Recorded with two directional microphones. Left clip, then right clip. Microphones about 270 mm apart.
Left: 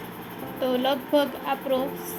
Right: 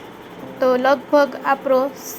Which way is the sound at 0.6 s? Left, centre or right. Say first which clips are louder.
Right 9 dB; centre.